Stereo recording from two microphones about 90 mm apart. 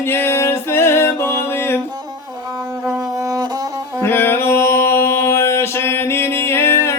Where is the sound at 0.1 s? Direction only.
30° left (ahead or behind).